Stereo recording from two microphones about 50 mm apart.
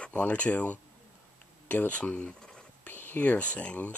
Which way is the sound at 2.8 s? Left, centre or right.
Left.